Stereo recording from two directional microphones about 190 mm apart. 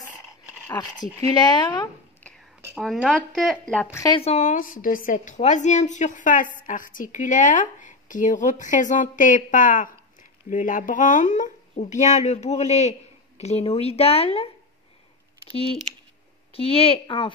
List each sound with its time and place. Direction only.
0.7 s speech: 20° left (ahead or behind)
2.8 s speech: 5° left (ahead or behind)
3.9 s a woman's voice: 15° left (ahead or behind)
4.2 s a woman's voice: 35° left (ahead or behind)
15.5 s speech: 30° left (ahead or behind)